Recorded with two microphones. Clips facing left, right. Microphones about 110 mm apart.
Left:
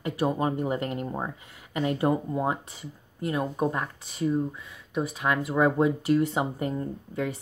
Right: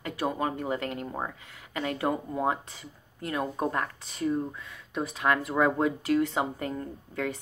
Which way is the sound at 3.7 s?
10° left (ahead or behind).